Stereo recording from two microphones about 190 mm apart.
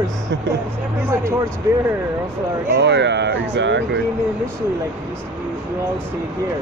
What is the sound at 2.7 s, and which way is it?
Speech, 65° right (ahead or behind).